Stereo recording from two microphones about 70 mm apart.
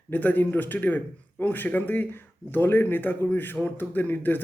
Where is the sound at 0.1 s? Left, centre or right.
Left.